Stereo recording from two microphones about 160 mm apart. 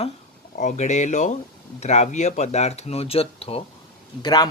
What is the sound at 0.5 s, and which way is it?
Speech, 50° left (ahead or behind).